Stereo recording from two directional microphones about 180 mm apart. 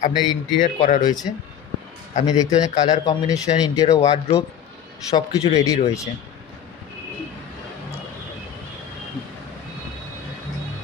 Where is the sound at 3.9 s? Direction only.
35° left (ahead or behind).